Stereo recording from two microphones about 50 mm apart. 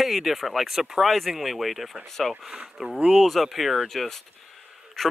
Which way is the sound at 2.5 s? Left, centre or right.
Centre.